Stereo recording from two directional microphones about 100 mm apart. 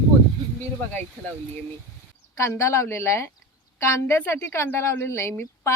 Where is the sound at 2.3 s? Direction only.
30° left (ahead or behind).